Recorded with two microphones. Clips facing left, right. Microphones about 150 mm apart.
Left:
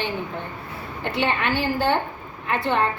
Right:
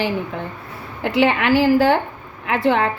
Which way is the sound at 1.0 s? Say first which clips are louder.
Right 7 dB; 90° right.